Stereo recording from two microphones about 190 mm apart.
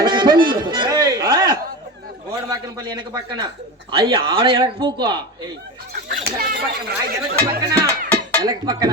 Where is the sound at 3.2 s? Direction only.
25° right (ahead or behind).